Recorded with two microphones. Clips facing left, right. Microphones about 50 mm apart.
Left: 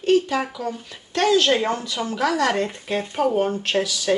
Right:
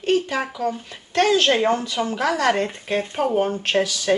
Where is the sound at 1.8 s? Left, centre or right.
Right.